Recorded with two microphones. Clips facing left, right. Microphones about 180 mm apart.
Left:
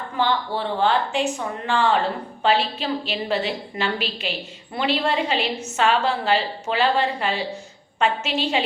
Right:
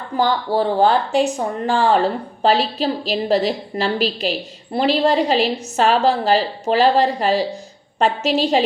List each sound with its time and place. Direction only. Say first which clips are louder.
0.2 s speech: right 5 dB; 40° right (ahead or behind)